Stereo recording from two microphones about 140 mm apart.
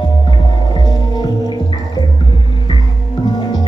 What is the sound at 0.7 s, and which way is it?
Music, 30° left (ahead or behind).